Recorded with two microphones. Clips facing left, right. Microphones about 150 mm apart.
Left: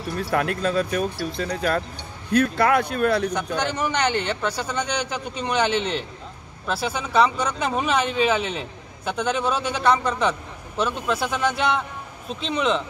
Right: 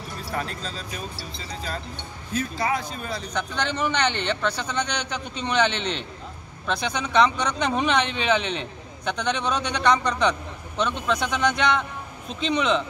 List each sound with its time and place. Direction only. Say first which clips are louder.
0.2 s speech: left 8 dB; 65° left (ahead or behind)
3.5 s a man's voice: left 1 dB; 10° left (ahead or behind)